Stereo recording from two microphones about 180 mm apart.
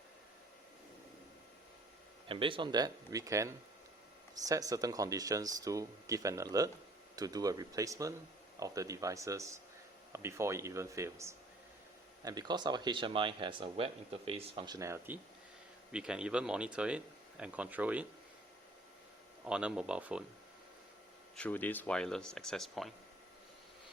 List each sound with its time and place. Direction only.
2.2 s speech: 30° right (ahead or behind); by 18.0 s 10° right (ahead or behind)
19.5 s speech: 5° right (ahead or behind)
21.3 s speech: 10° left (ahead or behind)